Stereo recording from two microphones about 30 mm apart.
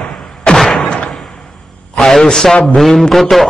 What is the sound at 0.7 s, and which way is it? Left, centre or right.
Slam, left.